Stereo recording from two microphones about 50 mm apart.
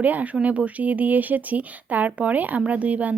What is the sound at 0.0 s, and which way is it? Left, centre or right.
A woman's voice, right.